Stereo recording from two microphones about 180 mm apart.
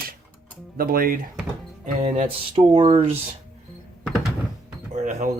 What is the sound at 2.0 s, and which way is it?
Speech, 40° right (ahead or behind).